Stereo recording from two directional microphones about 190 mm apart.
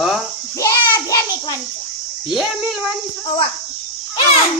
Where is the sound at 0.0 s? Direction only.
Centre (ahead or behind).